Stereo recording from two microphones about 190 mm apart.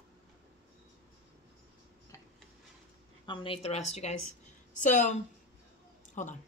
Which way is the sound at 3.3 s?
30° left (ahead or behind).